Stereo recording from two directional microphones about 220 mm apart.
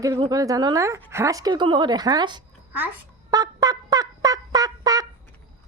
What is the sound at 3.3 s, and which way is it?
Fowl, 15° right (ahead or behind).